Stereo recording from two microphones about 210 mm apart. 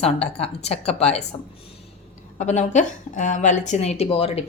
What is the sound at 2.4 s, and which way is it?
Speech, 35° left (ahead or behind).